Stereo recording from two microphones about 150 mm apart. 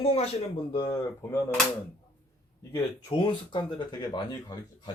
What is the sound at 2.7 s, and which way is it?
Speech, 30° left (ahead or behind).